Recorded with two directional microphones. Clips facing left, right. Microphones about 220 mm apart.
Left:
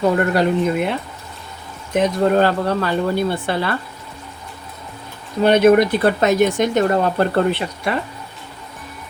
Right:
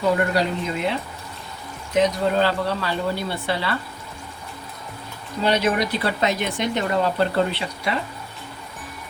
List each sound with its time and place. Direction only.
0.3 s speech: 55° left (ahead or behind)
5.4 s speech: 55° left (ahead or behind)